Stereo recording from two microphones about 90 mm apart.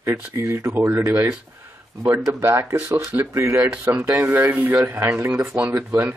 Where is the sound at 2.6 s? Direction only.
20° right (ahead or behind).